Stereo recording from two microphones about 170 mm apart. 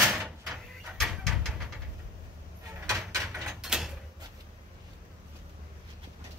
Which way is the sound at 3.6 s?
Centre (ahead or behind).